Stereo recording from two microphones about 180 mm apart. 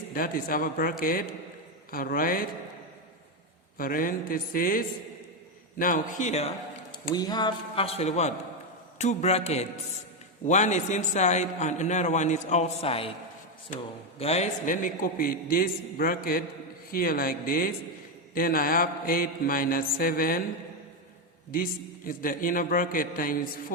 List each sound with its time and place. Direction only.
0.1 s a man's voice: 55° left (ahead or behind)
3.8 s a man's voice: 50° left (ahead or behind)
6.9 s a man's voice: 20° left (ahead or behind)
13.7 s a man's voice: 45° left (ahead or behind)
21.5 s a man's voice: 50° left (ahead or behind)